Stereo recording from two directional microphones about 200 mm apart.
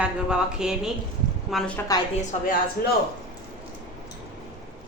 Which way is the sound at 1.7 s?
15° left (ahead or behind).